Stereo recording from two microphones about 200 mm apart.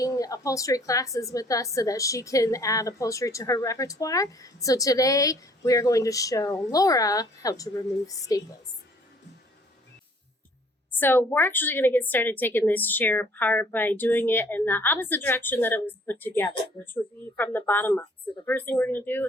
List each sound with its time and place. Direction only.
0.0 s a woman's voice: 15° left (ahead or behind)
10.9 s a woman's voice: 10° left (ahead or behind)